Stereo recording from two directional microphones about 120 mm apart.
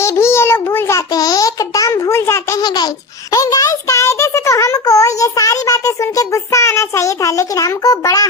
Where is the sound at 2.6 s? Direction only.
35° left (ahead or behind).